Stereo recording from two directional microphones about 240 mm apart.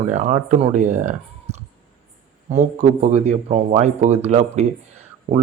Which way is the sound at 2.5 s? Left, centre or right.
Right.